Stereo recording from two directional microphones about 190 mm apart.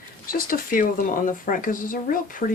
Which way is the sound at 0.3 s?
45° left (ahead or behind).